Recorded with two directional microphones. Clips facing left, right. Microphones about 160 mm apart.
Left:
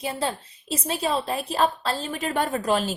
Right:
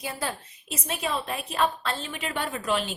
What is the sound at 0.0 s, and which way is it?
A woman's voice, 25° left (ahead or behind).